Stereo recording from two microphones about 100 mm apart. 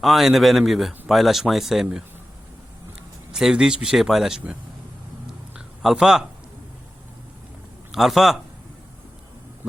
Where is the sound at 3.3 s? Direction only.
5° right (ahead or behind).